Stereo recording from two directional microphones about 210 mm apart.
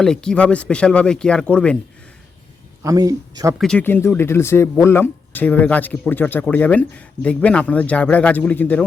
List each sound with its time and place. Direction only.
0.0 s speech: 5° left (ahead or behind)
2.8 s speech: 15° right (ahead or behind)
3.6 s speech: 5° left (ahead or behind)